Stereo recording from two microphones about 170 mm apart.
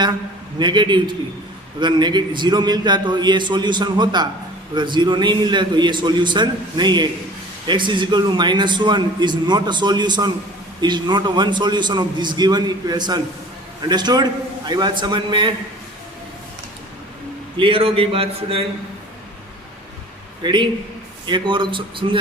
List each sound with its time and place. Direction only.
0.6 s a man's voice: 25° right (ahead or behind)
17.6 s speech: 30° right (ahead or behind)
20.4 s a man's voice: 25° right (ahead or behind)